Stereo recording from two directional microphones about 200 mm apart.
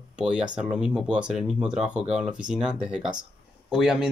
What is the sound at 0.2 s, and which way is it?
Speech, 5° right (ahead or behind).